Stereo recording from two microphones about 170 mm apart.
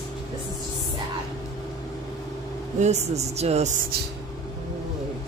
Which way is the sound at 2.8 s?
40° right (ahead or behind).